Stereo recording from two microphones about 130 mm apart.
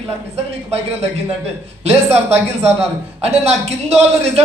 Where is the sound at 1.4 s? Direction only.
55° right (ahead or behind).